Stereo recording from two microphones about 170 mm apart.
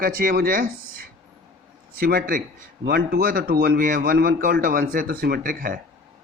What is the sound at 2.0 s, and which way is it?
Speech, 60° right (ahead or behind).